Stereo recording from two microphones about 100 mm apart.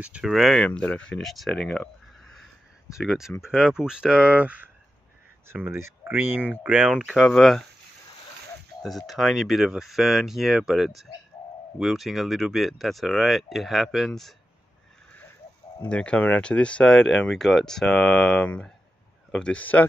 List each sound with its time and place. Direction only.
0.0 s speech: 10° right (ahead or behind)
0.3 s speech: centre (ahead or behind)
0.7 s speech: 10° left (ahead or behind); by 4.6 s 15° right (ahead or behind)
5.5 s speech: 25° right (ahead or behind); by 7.6 s 5° left (ahead or behind)
8.8 s speech: centre (ahead or behind)
15.9 s speech: 10° left (ahead or behind)